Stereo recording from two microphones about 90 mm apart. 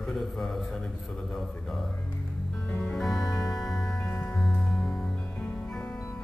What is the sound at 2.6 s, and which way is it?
Music, 15° left (ahead or behind).